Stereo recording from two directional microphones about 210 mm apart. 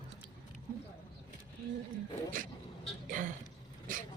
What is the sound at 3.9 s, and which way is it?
Dog, 40° right (ahead or behind).